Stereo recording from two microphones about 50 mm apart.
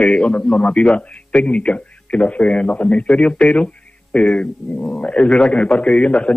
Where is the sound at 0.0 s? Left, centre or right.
Centre.